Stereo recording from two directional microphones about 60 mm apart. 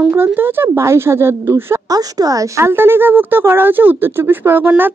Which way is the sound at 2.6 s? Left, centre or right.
Right.